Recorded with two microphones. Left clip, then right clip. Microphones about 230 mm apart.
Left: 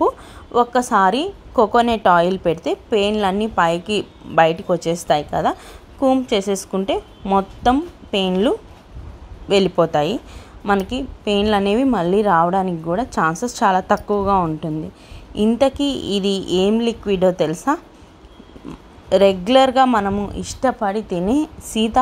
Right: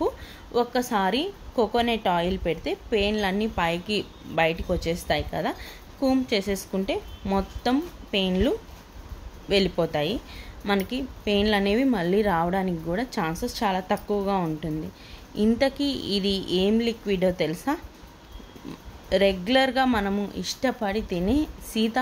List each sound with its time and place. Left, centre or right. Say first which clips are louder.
0.0 s a woman's voice: left 9 dB; centre
19.0 s a woman's voice: left 8 dB; centre